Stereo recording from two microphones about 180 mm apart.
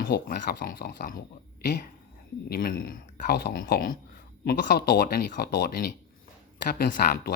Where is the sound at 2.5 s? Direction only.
50° left (ahead or behind).